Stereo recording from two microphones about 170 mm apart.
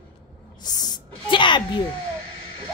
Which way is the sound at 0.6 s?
25° left (ahead or behind).